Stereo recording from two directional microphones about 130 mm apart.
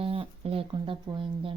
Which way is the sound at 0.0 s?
45° right (ahead or behind).